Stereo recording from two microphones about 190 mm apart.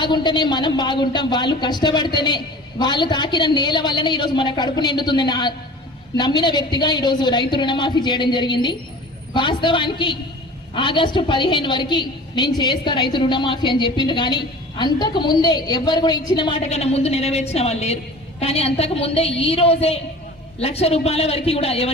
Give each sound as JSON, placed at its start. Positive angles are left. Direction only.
{"t": 0.0, "sound": "a woman's voice", "side_deg": 25}